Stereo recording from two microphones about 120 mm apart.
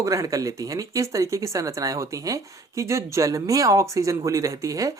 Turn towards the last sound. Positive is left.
turn(degrees=-30)  # may be behind; listen again after turning